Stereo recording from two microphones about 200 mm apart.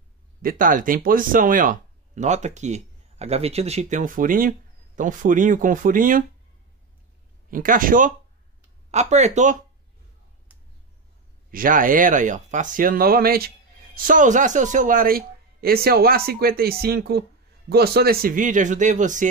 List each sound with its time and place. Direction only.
0.4 s speech: 45° right (ahead or behind)
7.5 s speech: 45° right (ahead or behind)
11.5 s speech: 45° right (ahead or behind)